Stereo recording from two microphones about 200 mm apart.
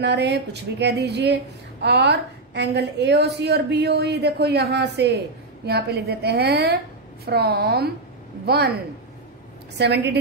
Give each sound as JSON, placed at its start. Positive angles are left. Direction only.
{"t": 0.0, "sound": "a woman's voice", "side_deg": -60}
{"t": 9.8, "sound": "a woman's voice", "side_deg": -60}